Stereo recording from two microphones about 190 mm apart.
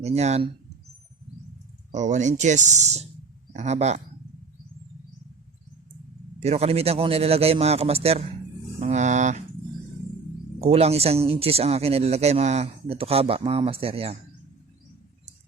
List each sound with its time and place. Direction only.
0.0 s speech: 35° right (ahead or behind)
1.9 s speech: 40° right (ahead or behind)
6.4 s speech: 35° right (ahead or behind)
10.6 s speech: 35° right (ahead or behind)